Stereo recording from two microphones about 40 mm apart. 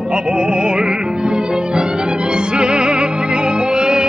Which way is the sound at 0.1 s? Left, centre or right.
Right.